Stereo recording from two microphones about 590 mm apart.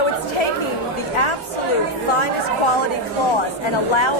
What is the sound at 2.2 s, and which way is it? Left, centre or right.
Chatter, left.